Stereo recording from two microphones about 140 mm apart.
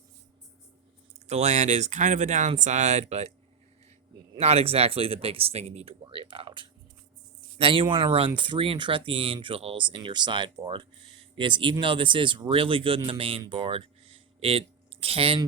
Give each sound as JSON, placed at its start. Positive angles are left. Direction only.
{"t": 1.3, "sound": "speech", "side_deg": -55}
{"t": 4.4, "sound": "speech", "side_deg": -45}
{"t": 13.4, "sound": "a sound", "side_deg": -35}